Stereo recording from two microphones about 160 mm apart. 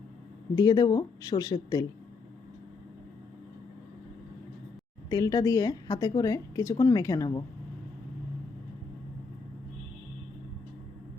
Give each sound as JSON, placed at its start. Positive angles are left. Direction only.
{"t": 0.5, "sound": "a woman's voice", "side_deg": 25}
{"t": 5.0, "sound": "a woman's voice", "side_deg": 20}